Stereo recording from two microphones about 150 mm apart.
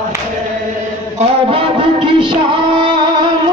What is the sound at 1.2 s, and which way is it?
Music, 40° right (ahead or behind).